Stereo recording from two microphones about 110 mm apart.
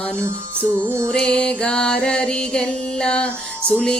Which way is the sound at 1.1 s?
10° left (ahead or behind).